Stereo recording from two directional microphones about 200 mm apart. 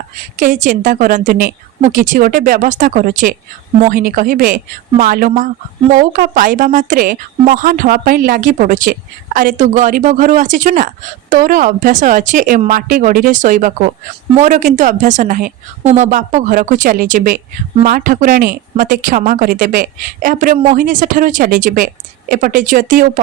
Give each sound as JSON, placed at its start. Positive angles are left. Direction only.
{"t": 0.3, "sound": "a woman's voice", "side_deg": -40}